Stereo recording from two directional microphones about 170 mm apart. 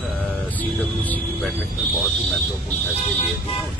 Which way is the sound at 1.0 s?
10° left (ahead or behind).